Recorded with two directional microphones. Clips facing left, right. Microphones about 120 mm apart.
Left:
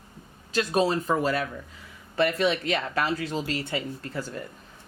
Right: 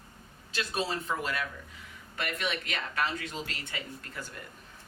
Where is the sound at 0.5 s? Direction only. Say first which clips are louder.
Left 9 dB; 40° left (ahead or behind).